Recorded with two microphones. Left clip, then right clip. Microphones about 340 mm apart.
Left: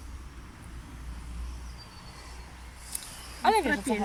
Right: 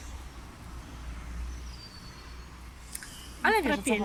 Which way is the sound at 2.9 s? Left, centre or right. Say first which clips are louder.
Left 2 dB; centre.